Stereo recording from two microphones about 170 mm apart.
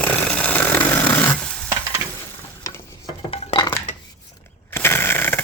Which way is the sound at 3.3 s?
30° left (ahead or behind).